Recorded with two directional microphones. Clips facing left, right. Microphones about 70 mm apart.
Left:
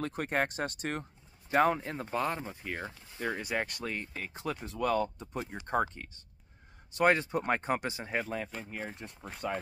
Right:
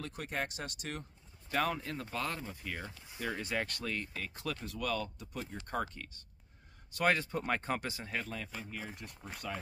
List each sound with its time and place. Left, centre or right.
0.0 s speech: left
1.5 s speech: left